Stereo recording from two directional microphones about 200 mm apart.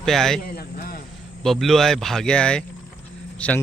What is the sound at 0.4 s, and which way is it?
Speech, 50° left (ahead or behind).